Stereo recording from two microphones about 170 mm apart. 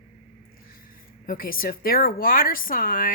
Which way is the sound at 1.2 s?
55° left (ahead or behind).